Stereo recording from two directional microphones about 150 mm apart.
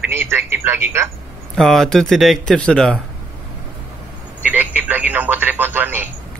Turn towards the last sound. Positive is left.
turn(degrees=-15)  # may be behind; listen again after turning